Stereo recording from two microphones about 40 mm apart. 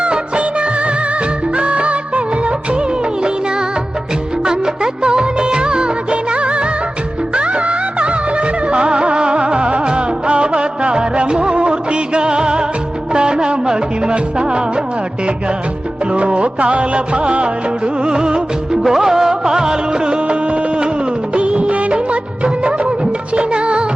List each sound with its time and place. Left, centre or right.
0.0 s music of bollywood: right
4.4 s music of bollywood: centre
13.1 s music: right
16.1 s music: right
18.8 s music: centre; by 20.9 s right
21.3 s music of bollywood: right